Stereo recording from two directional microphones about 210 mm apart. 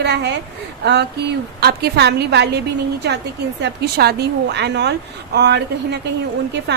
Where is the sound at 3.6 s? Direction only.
50° right (ahead or behind).